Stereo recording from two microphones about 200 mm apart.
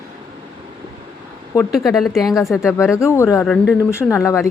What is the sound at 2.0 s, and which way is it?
Speech, centre (ahead or behind).